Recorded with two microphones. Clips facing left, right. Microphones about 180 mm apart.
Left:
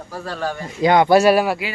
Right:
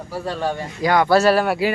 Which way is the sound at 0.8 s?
20° left (ahead or behind).